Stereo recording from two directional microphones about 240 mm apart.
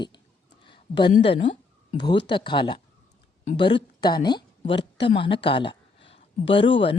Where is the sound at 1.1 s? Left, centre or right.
Left.